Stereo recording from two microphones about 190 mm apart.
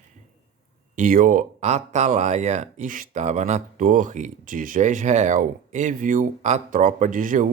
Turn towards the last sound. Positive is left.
turn(degrees=-45)  # may be behind; listen again after turning